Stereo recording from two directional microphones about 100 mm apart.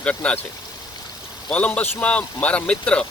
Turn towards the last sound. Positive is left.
turn(degrees=10)  # may be behind; listen again after turning